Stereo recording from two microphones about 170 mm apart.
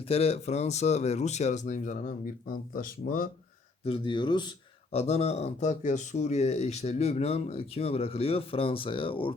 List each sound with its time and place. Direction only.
0.1 s speech: 35° left (ahead or behind); by 3.2 s 55° left (ahead or behind)
3.8 s speech: 30° left (ahead or behind)
4.9 s speech: 40° left (ahead or behind)